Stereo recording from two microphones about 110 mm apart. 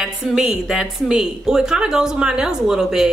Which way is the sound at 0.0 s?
5° right (ahead or behind).